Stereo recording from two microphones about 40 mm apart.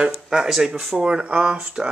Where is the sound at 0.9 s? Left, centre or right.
Right.